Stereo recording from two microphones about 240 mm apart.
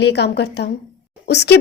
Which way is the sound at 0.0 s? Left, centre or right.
Left.